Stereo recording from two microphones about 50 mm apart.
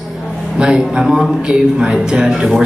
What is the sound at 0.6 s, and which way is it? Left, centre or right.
A man's voice, centre.